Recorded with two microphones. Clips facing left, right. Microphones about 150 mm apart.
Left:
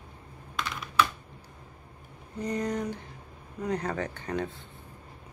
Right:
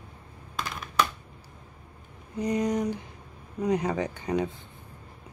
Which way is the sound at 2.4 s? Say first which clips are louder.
Right 4 dB; 15° right (ahead or behind).